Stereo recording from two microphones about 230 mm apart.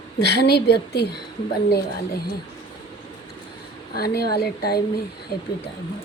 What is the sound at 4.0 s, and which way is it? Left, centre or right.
Speech, left.